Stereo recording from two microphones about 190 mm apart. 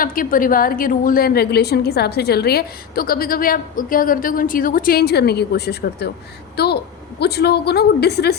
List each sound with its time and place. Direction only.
0.0 s a woman's voice: 45° left (ahead or behind)